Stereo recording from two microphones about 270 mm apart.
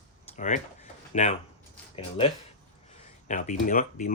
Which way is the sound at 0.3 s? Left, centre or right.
Left.